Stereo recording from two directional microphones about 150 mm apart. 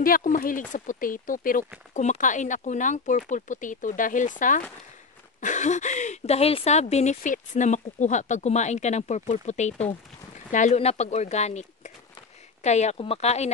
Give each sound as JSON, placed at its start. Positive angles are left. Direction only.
{"t": 0.0, "sound": "speech", "side_deg": 65}
{"t": 2.0, "sound": "speech", "side_deg": 55}
{"t": 12.9, "sound": "speech", "side_deg": 40}